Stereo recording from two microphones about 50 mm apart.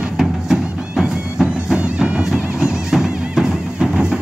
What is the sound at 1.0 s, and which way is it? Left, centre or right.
Music, centre.